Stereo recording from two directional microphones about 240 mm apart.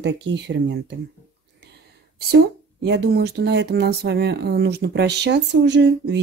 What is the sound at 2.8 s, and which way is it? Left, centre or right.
Speech, right.